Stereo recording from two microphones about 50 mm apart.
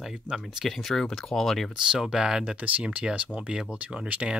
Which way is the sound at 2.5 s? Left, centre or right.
Right.